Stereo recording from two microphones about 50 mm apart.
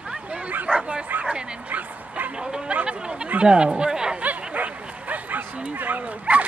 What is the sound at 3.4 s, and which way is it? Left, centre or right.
Speech, centre.